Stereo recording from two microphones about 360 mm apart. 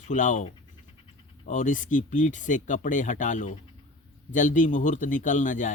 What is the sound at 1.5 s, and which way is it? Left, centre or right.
A man's voice, left.